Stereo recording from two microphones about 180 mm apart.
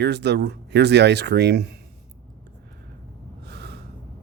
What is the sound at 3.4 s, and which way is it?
Gasp, 65° right (ahead or behind).